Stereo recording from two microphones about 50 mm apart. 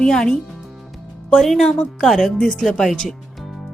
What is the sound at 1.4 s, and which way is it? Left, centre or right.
A woman's voice, centre.